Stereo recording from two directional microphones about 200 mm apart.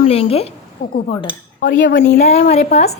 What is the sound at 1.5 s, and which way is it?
Speech, 45° left (ahead or behind).